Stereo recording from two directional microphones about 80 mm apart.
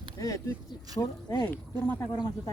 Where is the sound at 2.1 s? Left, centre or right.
Left.